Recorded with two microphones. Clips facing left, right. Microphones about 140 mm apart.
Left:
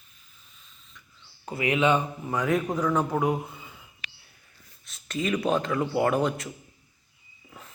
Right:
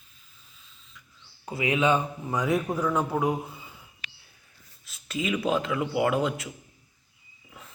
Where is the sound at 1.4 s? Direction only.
15° right (ahead or behind).